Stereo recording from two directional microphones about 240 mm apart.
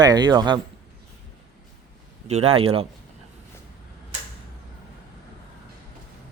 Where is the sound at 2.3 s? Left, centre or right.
Right.